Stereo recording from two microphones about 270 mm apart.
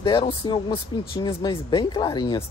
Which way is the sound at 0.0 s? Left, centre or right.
Centre.